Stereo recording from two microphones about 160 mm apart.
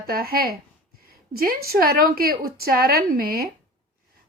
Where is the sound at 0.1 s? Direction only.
70° right (ahead or behind).